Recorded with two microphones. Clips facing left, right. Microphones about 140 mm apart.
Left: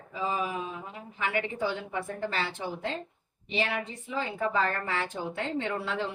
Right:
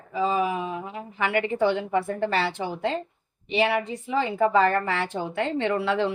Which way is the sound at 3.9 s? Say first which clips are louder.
Right 8 dB; 85° right.